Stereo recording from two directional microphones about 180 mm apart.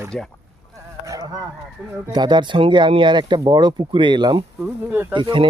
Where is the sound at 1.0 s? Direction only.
20° right (ahead or behind).